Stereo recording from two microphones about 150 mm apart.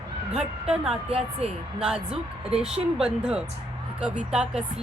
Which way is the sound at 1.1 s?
40° right (ahead or behind).